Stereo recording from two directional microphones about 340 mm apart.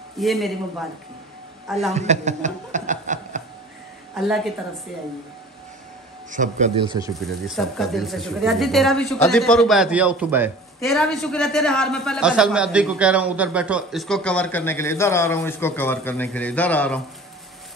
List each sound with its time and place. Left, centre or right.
0.2 s a man's voice: centre
1.7 s a man's voice: centre
2.0 s chuckle: centre
4.1 s a woman's voice: centre
6.3 s a man's voice: right
7.2 s a man's voice: centre